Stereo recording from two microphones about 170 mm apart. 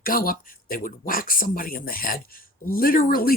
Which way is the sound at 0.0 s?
60° left (ahead or behind).